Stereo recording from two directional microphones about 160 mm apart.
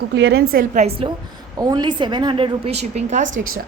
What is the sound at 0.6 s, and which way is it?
Speech, 55° right (ahead or behind).